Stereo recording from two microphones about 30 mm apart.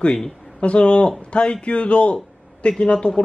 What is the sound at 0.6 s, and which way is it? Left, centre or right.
A man's voice, left.